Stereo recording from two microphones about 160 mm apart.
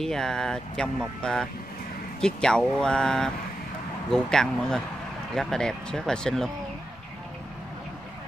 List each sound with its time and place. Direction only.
0.0 s speech: 5° left (ahead or behind)